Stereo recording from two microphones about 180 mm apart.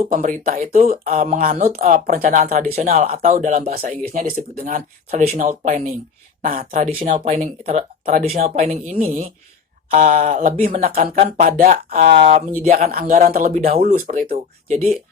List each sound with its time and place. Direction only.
0.0 s speech: 45° right (ahead or behind)
1.1 s speech: 40° right (ahead or behind)
1.4 s speech: 55° right (ahead or behind); by 3.7 s 40° right (ahead or behind)
4.1 s speech: 50° right (ahead or behind)
7.3 s speech: 40° right (ahead or behind)
11.4 s speech: 55° right (ahead or behind)